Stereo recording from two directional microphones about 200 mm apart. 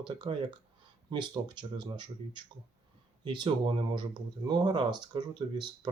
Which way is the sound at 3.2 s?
25° right (ahead or behind).